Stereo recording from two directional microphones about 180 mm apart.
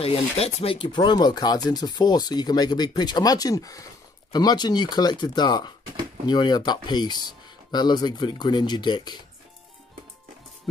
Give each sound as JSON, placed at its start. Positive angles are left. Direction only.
{"t": 0.0, "sound": "speech", "side_deg": 35}